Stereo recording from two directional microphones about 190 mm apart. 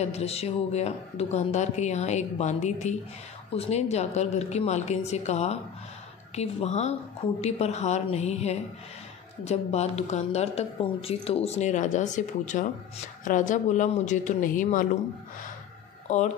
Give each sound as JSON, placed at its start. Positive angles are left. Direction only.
{"t": 0.0, "sound": "speech", "side_deg": 35}
{"t": 16.1, "sound": "speech", "side_deg": 40}